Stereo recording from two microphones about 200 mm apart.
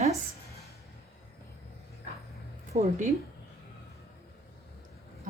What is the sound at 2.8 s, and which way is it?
Speech, 40° right (ahead or behind).